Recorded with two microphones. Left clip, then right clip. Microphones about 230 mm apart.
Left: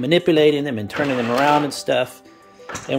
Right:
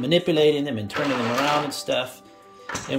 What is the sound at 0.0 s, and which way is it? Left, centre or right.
Speech, centre.